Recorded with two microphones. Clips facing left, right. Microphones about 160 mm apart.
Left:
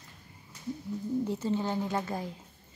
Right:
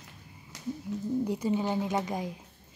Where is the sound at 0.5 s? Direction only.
90° right.